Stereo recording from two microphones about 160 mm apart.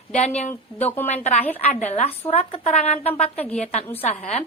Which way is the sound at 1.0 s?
45° left (ahead or behind).